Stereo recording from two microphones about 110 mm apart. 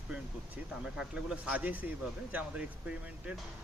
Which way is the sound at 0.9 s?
10° right (ahead or behind).